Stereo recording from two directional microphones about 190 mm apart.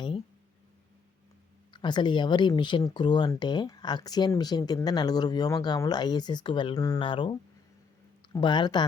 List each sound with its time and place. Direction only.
1.7 s speech: 25° left (ahead or behind)